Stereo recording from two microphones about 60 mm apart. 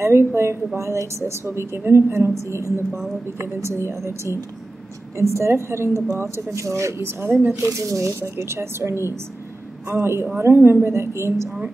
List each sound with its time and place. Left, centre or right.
0.0 s a woman's voice: right
7.6 s speech: right
8.4 s a woman's voice: right